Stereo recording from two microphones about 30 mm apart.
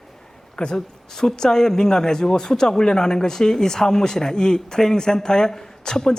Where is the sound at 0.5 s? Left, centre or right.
Left.